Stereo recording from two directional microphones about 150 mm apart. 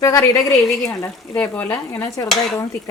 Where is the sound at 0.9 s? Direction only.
10° left (ahead or behind).